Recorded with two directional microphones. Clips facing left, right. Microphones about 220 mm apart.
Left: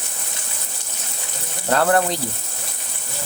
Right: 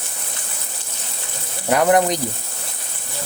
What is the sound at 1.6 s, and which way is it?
Speech, 15° right (ahead or behind).